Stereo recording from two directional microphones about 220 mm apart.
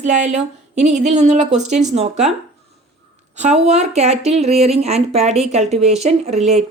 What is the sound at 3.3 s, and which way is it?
A woman's voice, 30° right (ahead or behind).